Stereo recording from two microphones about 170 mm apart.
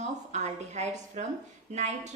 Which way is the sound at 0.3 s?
45° right (ahead or behind).